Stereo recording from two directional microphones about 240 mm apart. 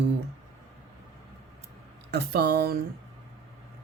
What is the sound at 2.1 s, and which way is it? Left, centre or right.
Speech, right.